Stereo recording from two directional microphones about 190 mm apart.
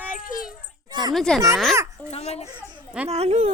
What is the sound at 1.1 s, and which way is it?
Speech, 5° left (ahead or behind).